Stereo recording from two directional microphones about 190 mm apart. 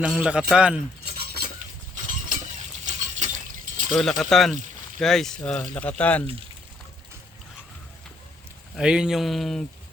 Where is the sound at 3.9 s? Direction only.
Centre (ahead or behind).